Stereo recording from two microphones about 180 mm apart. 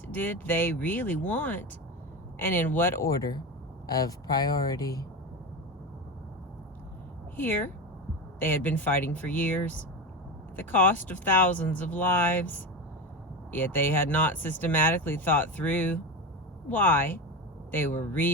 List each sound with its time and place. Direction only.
0.1 s speech: 10° left (ahead or behind)
7.3 s speech: 10° left (ahead or behind)